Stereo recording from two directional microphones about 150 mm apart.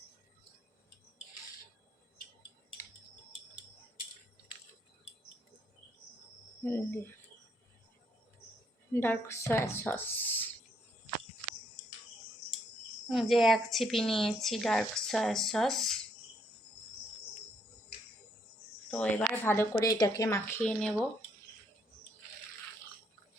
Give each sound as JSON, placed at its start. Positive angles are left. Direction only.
{"t": 6.7, "sound": "speech", "side_deg": 15}
{"t": 8.9, "sound": "speech", "side_deg": 15}
{"t": 13.1, "sound": "speech", "side_deg": 0}
{"t": 18.9, "sound": "speech", "side_deg": 10}
{"t": 20.6, "sound": "speech", "side_deg": 5}